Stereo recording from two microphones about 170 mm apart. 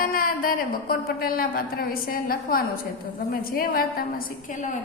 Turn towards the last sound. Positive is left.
turn(degrees=60)  # may be behind; listen again after turning